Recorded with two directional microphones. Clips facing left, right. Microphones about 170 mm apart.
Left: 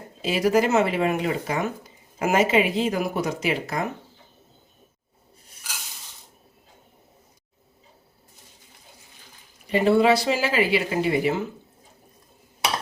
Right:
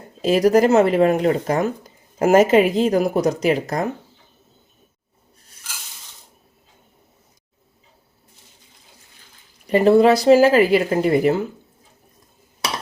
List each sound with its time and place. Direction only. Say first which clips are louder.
0.2 s speech: right 6 dB; 40° right (ahead or behind)
9.6 s speech: right 5 dB; 45° right (ahead or behind)